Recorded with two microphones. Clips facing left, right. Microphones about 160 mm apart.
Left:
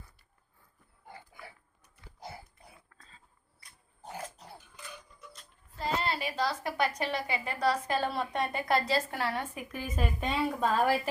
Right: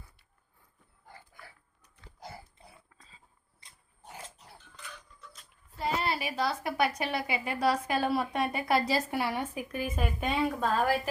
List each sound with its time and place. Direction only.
2.6 s dog: 25° right (ahead or behind)
2.9 s dog: 15° right (ahead or behind)
5.8 s a woman's voice: 15° right (ahead or behind)